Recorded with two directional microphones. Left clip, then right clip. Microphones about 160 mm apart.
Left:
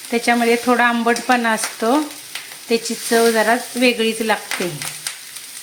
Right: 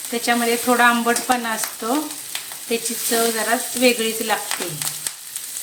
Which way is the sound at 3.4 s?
50° left (ahead or behind).